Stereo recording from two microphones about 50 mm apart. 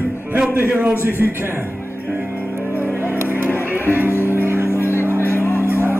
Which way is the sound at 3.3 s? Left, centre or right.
Left.